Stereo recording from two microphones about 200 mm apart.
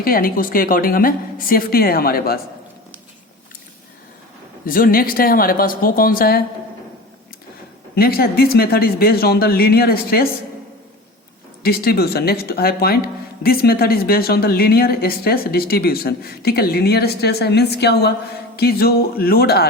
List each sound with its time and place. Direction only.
0.0 s speech: 45° left (ahead or behind)
4.6 s speech: 45° left (ahead or behind)
7.9 s speech: 50° left (ahead or behind)
11.6 s speech: 50° left (ahead or behind)